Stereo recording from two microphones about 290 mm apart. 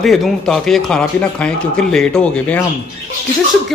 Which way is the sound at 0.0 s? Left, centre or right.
Centre.